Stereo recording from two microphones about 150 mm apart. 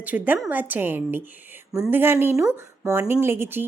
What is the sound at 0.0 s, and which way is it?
Speech, 10° right (ahead or behind).